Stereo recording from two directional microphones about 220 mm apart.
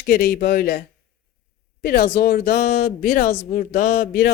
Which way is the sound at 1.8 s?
45° left (ahead or behind).